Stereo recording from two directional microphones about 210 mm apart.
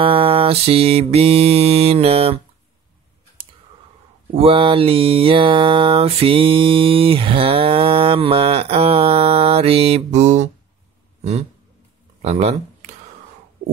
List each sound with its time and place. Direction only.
0.0 s mantra: 25° right (ahead or behind)
4.4 s mantra: 25° right (ahead or behind)
12.2 s a sound: 30° right (ahead or behind)